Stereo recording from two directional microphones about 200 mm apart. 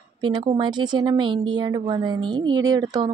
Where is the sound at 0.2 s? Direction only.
20° right (ahead or behind).